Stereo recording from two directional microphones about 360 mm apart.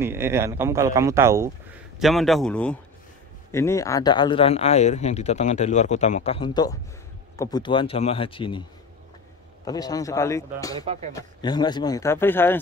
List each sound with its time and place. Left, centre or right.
0.0 s a man's voice: centre
9.7 s speech: centre